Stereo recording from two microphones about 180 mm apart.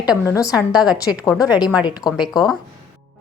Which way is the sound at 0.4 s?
5° right (ahead or behind).